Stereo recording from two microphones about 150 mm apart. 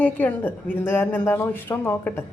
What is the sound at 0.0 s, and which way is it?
Speech, 10° left (ahead or behind).